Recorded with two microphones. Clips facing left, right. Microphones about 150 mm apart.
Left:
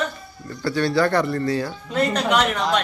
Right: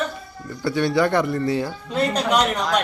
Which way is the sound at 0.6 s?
20° right (ahead or behind).